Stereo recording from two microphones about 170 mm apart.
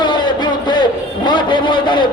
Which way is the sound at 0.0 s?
25° left (ahead or behind).